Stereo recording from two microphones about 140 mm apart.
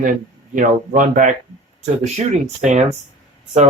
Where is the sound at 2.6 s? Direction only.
55° right (ahead or behind).